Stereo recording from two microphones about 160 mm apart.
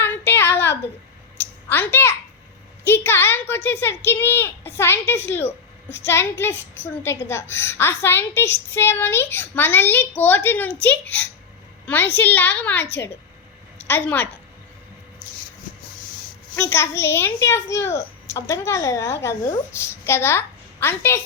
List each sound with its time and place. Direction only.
0.0 s a sound: 15° left (ahead or behind)
2.8 s a woman's voice: 15° left (ahead or behind)
13.8 s a woman's voice: 10° left (ahead or behind)
16.6 s a woman's voice: 15° left (ahead or behind)